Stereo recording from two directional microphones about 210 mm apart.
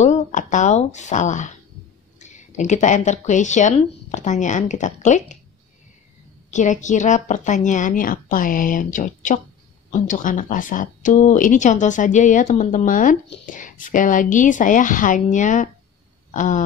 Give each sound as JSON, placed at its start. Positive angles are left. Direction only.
{"t": 0.0, "sound": "a sound", "side_deg": 35}
{"t": 2.1, "sound": "speech", "side_deg": 35}
{"t": 6.5, "sound": "speech", "side_deg": 35}